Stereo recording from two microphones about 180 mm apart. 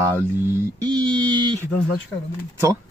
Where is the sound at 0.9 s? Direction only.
20° right (ahead or behind).